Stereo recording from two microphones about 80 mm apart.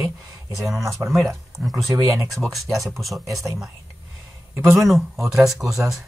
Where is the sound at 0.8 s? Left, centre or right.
Right.